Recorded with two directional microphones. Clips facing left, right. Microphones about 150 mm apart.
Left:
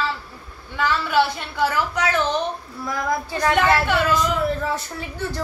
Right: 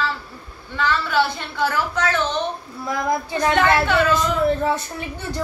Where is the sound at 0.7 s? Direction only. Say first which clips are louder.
Left 1 dB; 10° left (ahead or behind).